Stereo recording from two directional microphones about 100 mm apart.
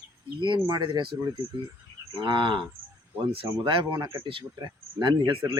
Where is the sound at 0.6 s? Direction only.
45° right (ahead or behind).